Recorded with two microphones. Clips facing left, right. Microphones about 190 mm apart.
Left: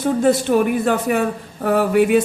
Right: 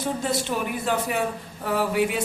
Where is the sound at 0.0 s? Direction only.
55° left (ahead or behind).